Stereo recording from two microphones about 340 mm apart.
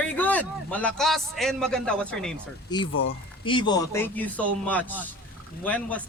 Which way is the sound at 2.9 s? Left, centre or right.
Left.